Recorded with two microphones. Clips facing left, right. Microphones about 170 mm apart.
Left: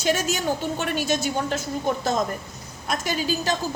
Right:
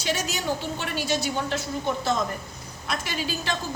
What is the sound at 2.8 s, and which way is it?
Speech, 45° left (ahead or behind).